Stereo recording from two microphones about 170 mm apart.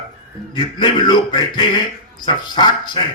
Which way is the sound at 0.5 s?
25° left (ahead or behind).